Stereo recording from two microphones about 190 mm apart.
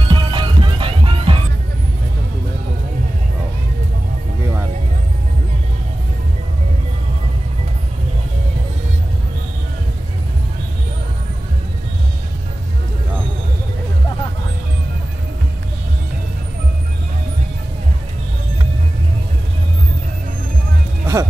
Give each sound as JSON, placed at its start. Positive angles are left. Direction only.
{"t": 0.1, "sound": "music", "side_deg": -25}
{"t": 21.0, "sound": "music", "side_deg": -15}